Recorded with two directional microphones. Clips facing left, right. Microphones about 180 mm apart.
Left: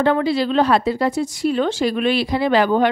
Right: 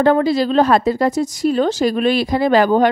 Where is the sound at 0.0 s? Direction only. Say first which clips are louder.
Right 3 dB; 40° right (ahead or behind).